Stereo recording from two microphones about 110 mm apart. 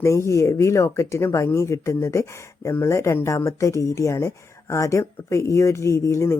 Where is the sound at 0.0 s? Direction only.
25° left (ahead or behind).